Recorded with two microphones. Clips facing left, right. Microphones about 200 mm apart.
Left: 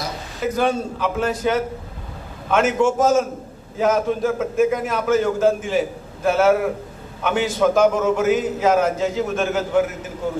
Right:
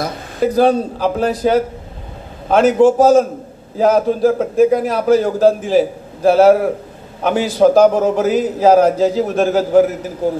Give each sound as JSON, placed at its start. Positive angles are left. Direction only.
{"t": 0.4, "sound": "a man's voice", "side_deg": -35}